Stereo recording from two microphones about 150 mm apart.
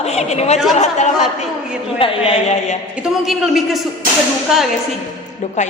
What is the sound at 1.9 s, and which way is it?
Speech, 40° left (ahead or behind).